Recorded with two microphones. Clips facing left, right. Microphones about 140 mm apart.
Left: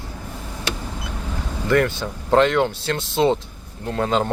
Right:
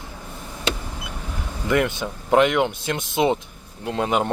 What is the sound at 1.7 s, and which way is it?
Speech, 15° right (ahead or behind).